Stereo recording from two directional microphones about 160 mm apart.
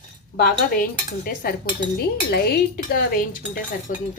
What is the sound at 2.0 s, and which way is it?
Speech, 85° left.